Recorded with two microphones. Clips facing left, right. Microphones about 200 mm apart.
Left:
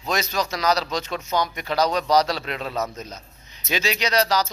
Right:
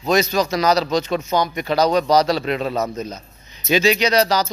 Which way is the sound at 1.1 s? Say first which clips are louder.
Right 5 dB; 25° right (ahead or behind).